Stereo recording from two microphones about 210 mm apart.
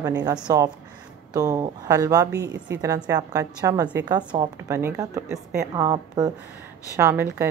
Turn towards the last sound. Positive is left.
turn(degrees=-10)  # may be behind; listen again after turning